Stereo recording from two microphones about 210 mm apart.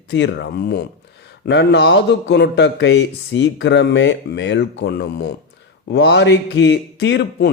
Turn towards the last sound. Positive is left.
turn(degrees=55)  # may be behind; listen again after turning